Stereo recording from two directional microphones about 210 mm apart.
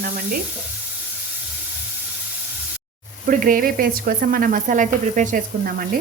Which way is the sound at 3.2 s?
40° right (ahead or behind).